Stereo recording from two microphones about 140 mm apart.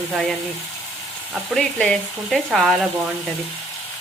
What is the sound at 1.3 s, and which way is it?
Speech, 5° left (ahead or behind).